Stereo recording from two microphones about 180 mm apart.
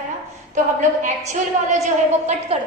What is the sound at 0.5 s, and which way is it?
A woman's voice, 45° right (ahead or behind).